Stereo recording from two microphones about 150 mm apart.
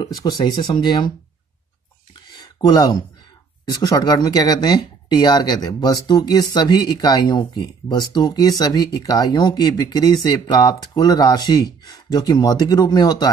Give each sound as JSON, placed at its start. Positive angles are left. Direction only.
{"t": 0.0, "sound": "speech", "side_deg": 25}
{"t": 2.3, "sound": "a sound", "side_deg": 25}
{"t": 3.7, "sound": "speech", "side_deg": 25}